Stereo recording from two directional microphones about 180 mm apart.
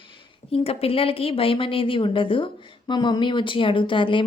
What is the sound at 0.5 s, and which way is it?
A woman's voice, 35° left (ahead or behind).